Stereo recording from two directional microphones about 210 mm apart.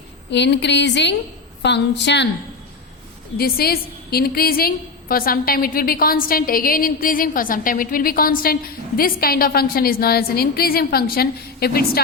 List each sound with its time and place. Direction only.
0.3 s a woman's voice: 55° left (ahead or behind)
3.3 s a woman's voice: 45° left (ahead or behind)